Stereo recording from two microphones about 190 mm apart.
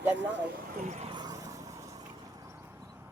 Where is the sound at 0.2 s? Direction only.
70° right (ahead or behind).